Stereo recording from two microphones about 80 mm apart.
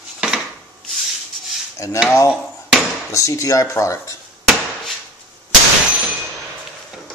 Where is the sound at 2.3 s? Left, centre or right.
Centre.